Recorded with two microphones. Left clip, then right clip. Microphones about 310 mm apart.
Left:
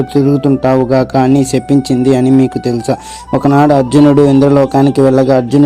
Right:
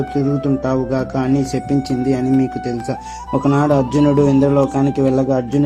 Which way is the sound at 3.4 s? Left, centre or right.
Left.